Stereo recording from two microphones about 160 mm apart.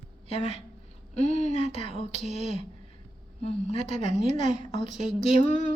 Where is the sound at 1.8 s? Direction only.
35° left (ahead or behind).